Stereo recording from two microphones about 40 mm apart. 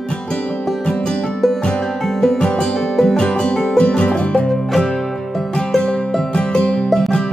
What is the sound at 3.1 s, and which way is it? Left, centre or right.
Music, left.